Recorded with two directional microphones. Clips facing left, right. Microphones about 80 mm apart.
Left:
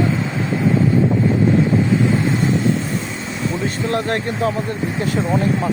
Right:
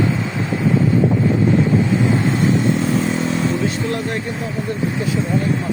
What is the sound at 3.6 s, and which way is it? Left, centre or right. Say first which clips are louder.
Vehicle: left 1 dB; left.